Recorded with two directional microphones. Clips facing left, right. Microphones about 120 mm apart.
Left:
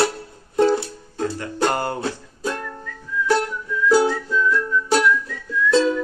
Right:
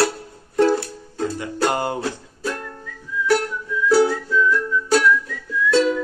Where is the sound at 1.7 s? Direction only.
15° right (ahead or behind).